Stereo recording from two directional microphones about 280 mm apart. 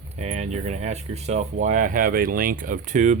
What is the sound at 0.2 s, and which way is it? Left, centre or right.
Speech, right.